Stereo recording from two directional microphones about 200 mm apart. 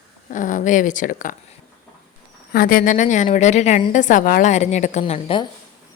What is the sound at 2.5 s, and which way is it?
Speech, 45° left (ahead or behind).